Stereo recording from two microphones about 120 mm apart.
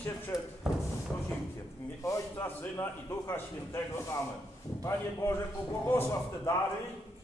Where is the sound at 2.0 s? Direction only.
25° left (ahead or behind).